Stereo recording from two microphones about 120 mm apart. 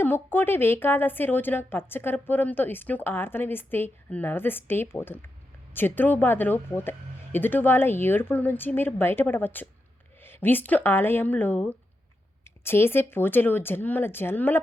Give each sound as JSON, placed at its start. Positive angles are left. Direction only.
{"t": 0.0, "sound": "a woman's voice", "side_deg": 15}